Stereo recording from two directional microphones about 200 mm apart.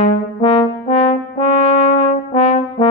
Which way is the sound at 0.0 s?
30° left (ahead or behind).